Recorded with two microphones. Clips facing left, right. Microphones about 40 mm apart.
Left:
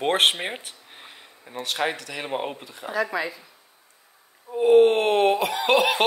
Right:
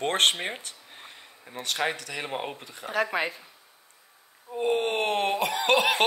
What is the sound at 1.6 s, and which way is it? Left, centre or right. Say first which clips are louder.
Speech: left 2 dB; centre.